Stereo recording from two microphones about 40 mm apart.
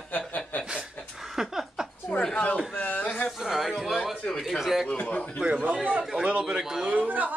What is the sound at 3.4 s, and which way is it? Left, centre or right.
Speech, centre.